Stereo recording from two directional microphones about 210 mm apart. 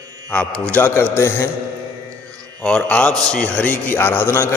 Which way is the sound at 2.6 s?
5° left (ahead or behind).